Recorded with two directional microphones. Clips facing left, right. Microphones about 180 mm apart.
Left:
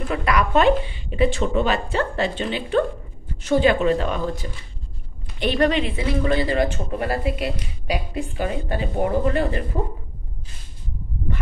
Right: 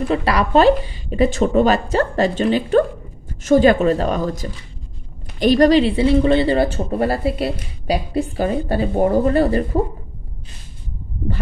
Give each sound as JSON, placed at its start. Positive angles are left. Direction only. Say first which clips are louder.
{"t": 0.1, "sound": "speech", "louder": "right 3 dB", "side_deg": -30}